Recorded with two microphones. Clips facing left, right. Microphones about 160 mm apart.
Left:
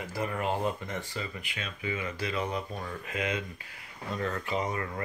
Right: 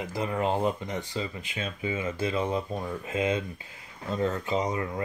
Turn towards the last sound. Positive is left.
turn(degrees=-20)  # may be behind; listen again after turning